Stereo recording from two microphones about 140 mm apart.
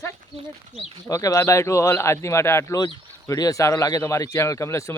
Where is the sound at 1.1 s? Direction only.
25° left (ahead or behind).